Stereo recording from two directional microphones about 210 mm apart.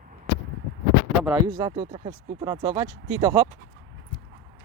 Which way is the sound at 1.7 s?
25° right (ahead or behind).